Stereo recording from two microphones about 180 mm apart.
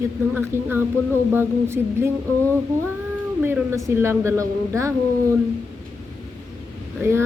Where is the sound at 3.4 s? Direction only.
15° right (ahead or behind).